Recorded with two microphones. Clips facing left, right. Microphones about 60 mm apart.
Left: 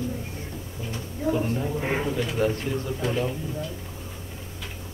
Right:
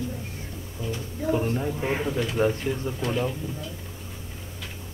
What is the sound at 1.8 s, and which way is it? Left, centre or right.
Speech, left.